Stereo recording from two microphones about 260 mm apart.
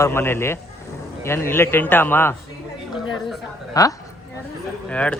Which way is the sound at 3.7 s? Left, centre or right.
Centre.